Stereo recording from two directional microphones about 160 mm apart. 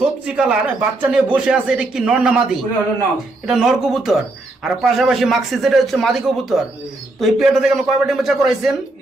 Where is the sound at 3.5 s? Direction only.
Centre (ahead or behind).